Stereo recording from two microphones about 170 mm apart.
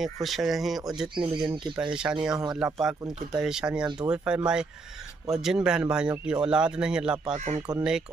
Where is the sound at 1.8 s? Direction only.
5° right (ahead or behind).